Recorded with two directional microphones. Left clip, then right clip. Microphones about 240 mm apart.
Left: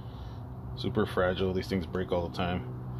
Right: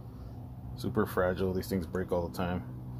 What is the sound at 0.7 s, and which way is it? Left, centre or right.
Speech, centre.